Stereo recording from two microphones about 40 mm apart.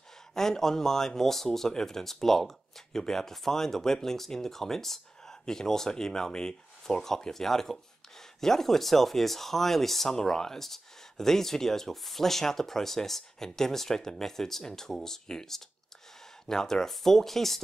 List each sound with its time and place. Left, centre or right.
0.3 s speech: centre